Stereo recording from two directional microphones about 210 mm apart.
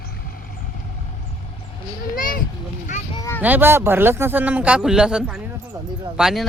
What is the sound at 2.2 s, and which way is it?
Speech, 40° left (ahead or behind).